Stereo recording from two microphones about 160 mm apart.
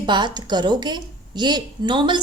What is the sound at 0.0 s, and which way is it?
A woman's voice, 30° right (ahead or behind).